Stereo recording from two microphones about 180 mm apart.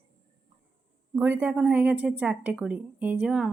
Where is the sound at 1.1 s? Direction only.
10° right (ahead or behind).